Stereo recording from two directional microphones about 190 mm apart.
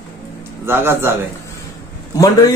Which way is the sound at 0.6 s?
10° right (ahead or behind).